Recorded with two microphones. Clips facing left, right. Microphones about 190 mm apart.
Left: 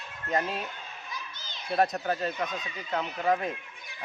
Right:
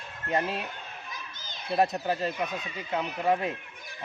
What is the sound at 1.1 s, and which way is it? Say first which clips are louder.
Children playing: left 1 dB; 50° right (ahead or behind).